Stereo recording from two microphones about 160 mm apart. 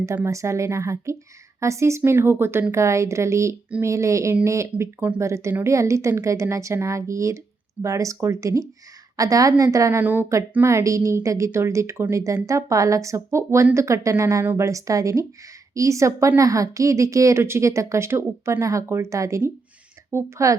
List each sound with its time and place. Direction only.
0.0 s a woman's voice: 15° right (ahead or behind)